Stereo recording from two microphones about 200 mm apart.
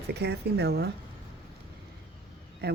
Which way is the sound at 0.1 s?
55° right (ahead or behind).